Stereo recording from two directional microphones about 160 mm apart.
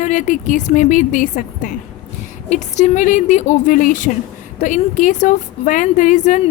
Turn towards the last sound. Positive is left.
turn(degrees=50)  # may be behind; listen again after turning